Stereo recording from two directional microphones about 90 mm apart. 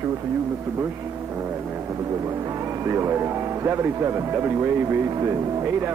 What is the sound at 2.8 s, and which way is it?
Speech, 30° right (ahead or behind).